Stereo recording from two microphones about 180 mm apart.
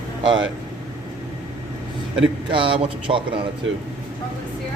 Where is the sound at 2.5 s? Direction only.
30° right (ahead or behind).